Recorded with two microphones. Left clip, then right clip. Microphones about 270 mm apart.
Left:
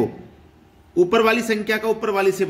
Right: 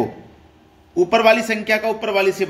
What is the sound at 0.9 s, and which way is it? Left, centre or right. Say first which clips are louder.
Speech: right 3 dB; centre.